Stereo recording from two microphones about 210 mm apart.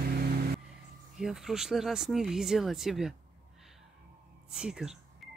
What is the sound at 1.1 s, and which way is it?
Speech, centre (ahead or behind).